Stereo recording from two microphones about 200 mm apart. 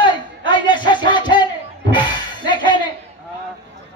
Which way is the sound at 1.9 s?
25° left (ahead or behind).